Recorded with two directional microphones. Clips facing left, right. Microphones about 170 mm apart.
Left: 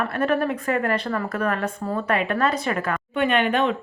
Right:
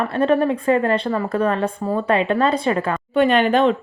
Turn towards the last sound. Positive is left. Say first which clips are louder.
# right 5 dB
turn(degrees=-35)  # may be behind; listen again after turning